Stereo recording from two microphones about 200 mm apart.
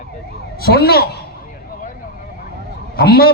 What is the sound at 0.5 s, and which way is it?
Speech, 50° left (ahead or behind).